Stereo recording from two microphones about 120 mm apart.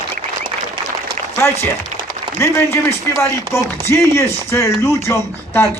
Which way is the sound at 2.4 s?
20° left (ahead or behind).